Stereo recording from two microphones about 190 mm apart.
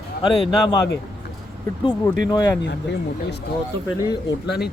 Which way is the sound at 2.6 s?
65° left (ahead or behind).